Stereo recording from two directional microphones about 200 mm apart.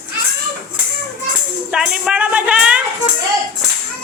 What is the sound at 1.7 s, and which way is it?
Speech, 5° right (ahead or behind).